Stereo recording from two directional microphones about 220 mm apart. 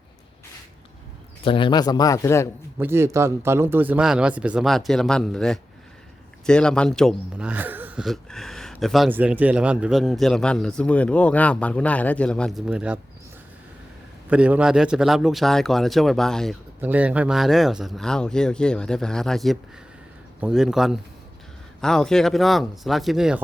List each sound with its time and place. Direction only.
1.5 s speech: 20° left (ahead or behind)
2.7 s speech: 10° right (ahead or behind)
14.3 s speech: 5° right (ahead or behind)